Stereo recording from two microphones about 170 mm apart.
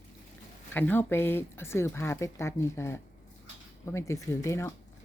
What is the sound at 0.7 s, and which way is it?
Speech, 10° left (ahead or behind).